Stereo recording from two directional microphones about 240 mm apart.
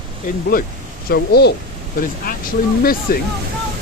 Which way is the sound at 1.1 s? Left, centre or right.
Left.